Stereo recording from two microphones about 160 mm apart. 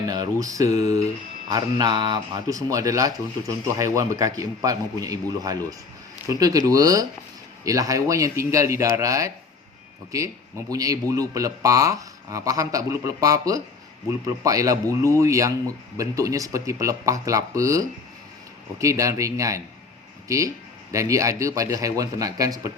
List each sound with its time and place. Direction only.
0.1 s a man's voice: 25° right (ahead or behind)